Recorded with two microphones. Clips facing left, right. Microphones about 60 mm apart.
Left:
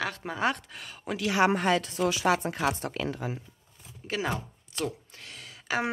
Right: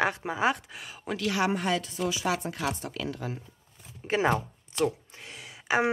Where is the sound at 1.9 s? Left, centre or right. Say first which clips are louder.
Left 3 dB; left.